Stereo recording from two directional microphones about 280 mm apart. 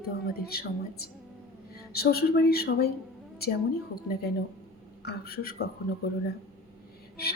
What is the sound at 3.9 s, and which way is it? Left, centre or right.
A woman's voice, left.